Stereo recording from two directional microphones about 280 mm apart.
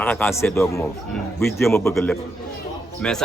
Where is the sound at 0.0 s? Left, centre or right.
Centre.